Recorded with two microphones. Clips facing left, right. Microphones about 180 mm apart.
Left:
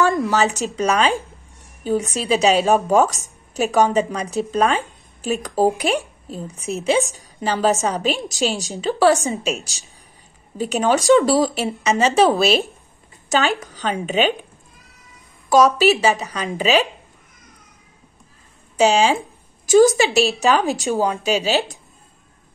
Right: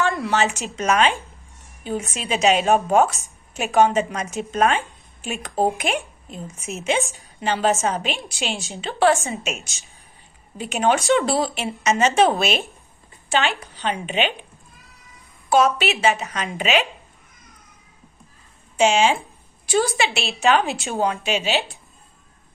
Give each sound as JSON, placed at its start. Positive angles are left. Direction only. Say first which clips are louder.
{"t": 0.3, "sound": "a woman's voice", "louder": "left 3 dB", "side_deg": 35}
{"t": 15.5, "sound": "a woman's voice", "louder": "left 4 dB", "side_deg": 35}
{"t": 18.8, "sound": "a woman's voice", "louder": "left 2 dB", "side_deg": 35}